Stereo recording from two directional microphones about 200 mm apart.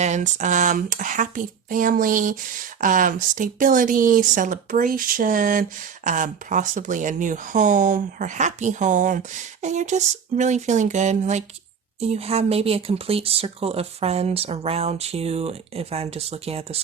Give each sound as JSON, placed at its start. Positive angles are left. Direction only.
{"t": 0.0, "sound": "speech", "side_deg": -35}